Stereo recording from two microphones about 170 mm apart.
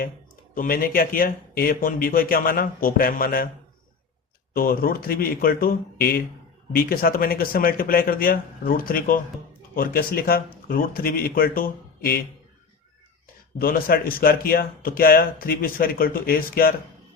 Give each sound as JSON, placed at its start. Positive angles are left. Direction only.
{"t": 0.5, "sound": "speech", "side_deg": 55}
{"t": 4.5, "sound": "speech", "side_deg": 60}
{"t": 13.6, "sound": "speech", "side_deg": 60}